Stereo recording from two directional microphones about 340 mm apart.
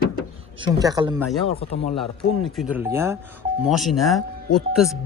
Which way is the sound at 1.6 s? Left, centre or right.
Centre.